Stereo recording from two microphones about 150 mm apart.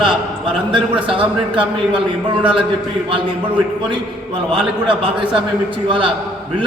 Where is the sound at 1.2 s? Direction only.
10° right (ahead or behind).